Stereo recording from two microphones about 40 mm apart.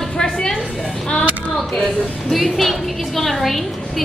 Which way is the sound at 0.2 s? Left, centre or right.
Centre.